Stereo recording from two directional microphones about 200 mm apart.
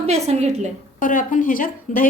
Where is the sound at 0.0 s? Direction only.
30° right (ahead or behind).